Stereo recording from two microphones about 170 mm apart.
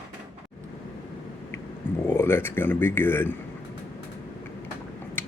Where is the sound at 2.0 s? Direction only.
15° left (ahead or behind).